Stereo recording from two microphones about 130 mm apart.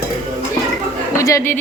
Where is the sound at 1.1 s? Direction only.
25° left (ahead or behind).